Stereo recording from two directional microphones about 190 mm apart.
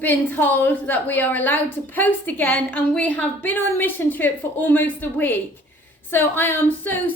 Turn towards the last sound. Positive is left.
turn(degrees=10)  # may be behind; listen again after turning